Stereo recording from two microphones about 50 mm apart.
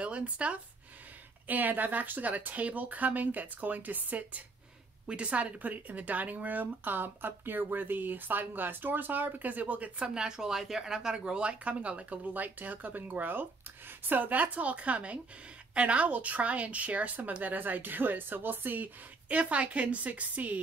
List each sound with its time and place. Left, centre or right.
0.0 s speech: right
1.5 s speech: right
10.1 s speech: centre; by 18.9 s right
19.2 s speech: right